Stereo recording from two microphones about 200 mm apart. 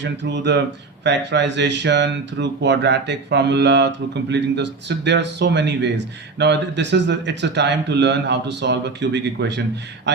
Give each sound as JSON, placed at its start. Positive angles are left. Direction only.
{"t": 0.0, "sound": "speech", "side_deg": -60}